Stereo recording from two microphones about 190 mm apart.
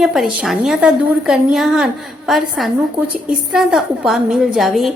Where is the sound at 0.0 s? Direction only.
Centre (ahead or behind).